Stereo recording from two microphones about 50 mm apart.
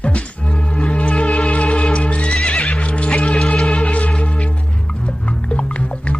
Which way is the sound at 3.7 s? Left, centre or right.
Left.